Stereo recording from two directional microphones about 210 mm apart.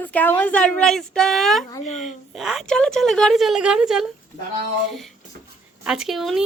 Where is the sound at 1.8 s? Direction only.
35° left (ahead or behind).